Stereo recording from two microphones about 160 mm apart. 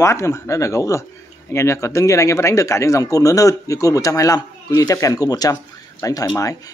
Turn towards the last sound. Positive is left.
turn(degrees=20)  # may be behind; listen again after turning